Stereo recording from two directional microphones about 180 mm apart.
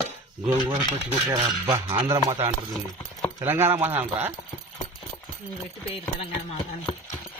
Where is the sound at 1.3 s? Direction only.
20° right (ahead or behind).